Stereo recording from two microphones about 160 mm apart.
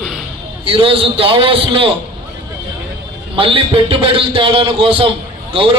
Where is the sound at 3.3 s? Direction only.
35° right (ahead or behind).